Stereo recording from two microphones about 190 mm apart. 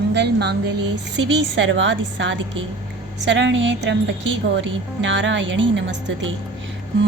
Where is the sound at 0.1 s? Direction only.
65° right (ahead or behind).